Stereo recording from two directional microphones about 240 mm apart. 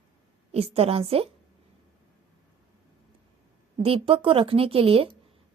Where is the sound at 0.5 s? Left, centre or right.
Right.